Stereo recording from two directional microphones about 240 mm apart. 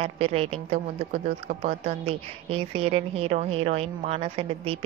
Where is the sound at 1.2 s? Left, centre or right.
Right.